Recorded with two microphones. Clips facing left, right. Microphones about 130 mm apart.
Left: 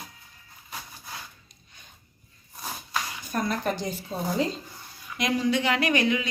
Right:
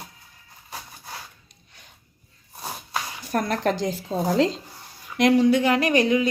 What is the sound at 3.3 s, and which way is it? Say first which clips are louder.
Speech: right 4 dB; 70° right (ahead or behind).